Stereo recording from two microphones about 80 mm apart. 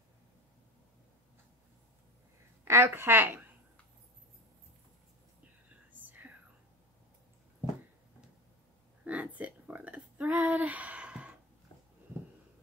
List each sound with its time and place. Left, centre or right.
2.6 s a woman's voice: right
5.9 s whispering: right
9.0 s a sound: centre